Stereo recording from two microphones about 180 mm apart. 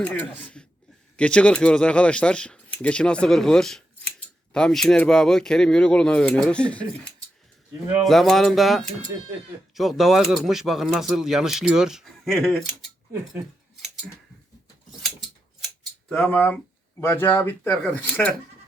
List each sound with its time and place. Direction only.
0.0 s speech: 10° left (ahead or behind)
16.0 s speech: 5° left (ahead or behind)